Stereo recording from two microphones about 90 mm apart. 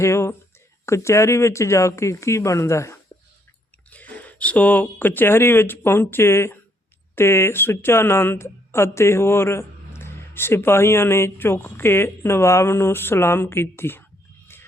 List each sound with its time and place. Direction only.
0.0 s speech: 30° left (ahead or behind)
3.8 s speech: 15° left (ahead or behind)
14.4 s a sound: 25° left (ahead or behind)